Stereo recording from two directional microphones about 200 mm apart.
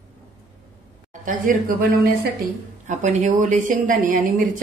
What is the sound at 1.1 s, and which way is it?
A woman's voice, 40° right (ahead or behind).